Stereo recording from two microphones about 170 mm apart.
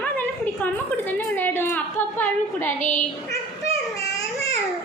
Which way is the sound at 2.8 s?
45° left (ahead or behind).